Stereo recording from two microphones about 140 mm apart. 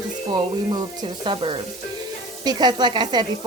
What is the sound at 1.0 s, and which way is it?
Speech, 40° right (ahead or behind).